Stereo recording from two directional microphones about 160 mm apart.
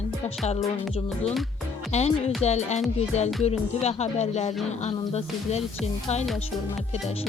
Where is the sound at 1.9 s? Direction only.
45° left (ahead or behind).